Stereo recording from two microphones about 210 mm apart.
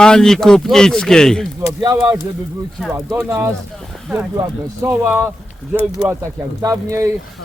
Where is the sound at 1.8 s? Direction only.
20° right (ahead or behind).